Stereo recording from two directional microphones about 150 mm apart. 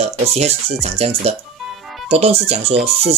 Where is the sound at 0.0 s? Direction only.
45° right (ahead or behind).